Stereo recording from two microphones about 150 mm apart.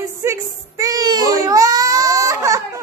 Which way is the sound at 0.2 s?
20° right (ahead or behind).